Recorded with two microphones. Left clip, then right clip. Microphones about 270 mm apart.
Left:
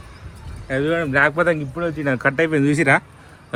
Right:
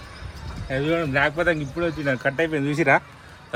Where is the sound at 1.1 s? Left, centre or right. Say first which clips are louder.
Left 6 dB; left.